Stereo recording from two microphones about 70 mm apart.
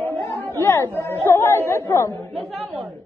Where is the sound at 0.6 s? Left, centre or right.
Left.